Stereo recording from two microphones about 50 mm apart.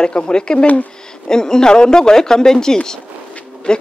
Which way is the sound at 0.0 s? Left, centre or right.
Centre.